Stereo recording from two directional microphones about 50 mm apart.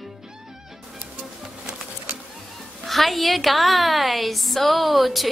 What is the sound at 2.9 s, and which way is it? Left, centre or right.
A woman's voice, centre.